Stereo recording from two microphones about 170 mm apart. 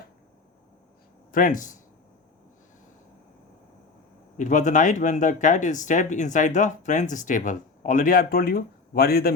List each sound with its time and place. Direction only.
1.3 s speech: 50° left (ahead or behind)
4.4 s speech: 45° left (ahead or behind); by 9.3 s 65° left (ahead or behind)